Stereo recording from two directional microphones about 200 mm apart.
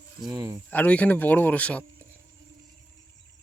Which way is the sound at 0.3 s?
20° right (ahead or behind).